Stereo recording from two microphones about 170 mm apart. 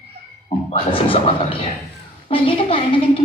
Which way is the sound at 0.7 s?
30° left (ahead or behind).